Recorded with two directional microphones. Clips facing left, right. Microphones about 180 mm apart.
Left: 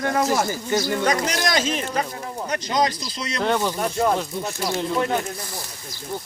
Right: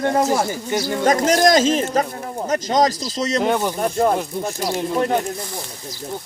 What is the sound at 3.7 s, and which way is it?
Speech, 40° right (ahead or behind).